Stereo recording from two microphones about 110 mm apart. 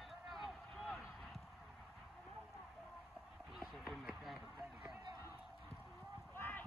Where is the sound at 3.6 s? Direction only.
Centre (ahead or behind).